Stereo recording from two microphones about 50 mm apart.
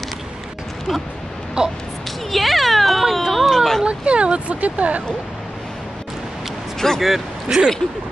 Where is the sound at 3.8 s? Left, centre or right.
Right.